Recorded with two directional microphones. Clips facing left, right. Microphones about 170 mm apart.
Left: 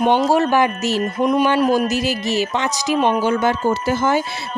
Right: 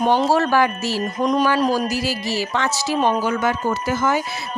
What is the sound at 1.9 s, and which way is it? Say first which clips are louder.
Speech: left 3 dB; 20° left (ahead or behind).